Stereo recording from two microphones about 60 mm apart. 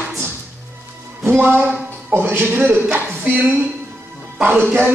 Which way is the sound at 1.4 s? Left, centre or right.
Right.